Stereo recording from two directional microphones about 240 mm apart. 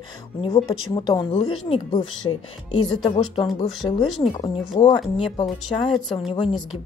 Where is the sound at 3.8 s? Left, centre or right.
Centre.